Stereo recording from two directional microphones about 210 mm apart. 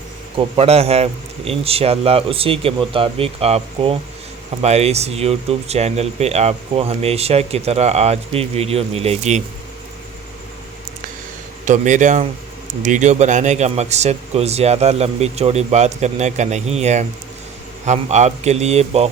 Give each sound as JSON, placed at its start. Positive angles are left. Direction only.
{"t": 0.3, "sound": "speech", "side_deg": -25}
{"t": 11.6, "sound": "speech", "side_deg": -35}